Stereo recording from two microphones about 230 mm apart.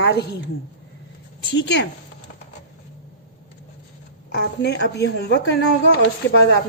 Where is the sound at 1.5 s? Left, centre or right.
Left.